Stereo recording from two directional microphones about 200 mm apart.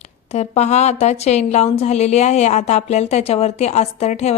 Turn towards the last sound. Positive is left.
turn(degrees=35)  # may be behind; listen again after turning